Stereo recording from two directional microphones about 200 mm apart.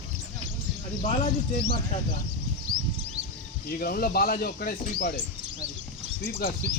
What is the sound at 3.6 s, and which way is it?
Speech, 45° left (ahead or behind).